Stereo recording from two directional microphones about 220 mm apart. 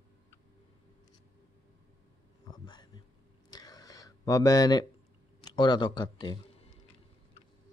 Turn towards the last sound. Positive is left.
turn(degrees=20)  # may be behind; listen again after turning